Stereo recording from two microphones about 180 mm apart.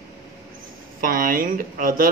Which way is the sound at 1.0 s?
50° right (ahead or behind).